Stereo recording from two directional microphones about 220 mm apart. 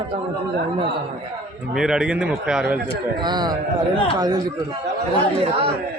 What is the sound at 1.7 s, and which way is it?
A man's voice, 5° right (ahead or behind).